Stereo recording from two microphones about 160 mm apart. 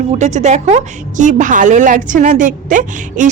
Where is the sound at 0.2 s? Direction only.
45° right (ahead or behind).